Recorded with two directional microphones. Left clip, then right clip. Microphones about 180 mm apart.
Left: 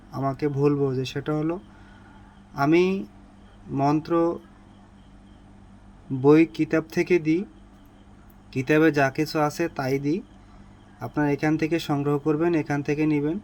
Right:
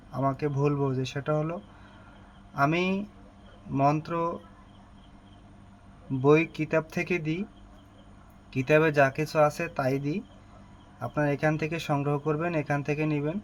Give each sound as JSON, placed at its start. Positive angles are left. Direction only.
{"t": 0.1, "sound": "speech", "side_deg": 15}
{"t": 2.6, "sound": "speech", "side_deg": 15}
{"t": 6.2, "sound": "speech", "side_deg": 15}
{"t": 8.5, "sound": "speech", "side_deg": 15}